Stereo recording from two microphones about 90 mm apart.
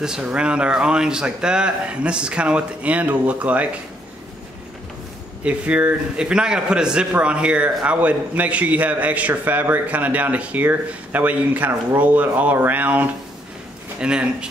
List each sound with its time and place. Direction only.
0.0 s a man's voice: 10° right (ahead or behind)
5.4 s a man's voice: 15° right (ahead or behind)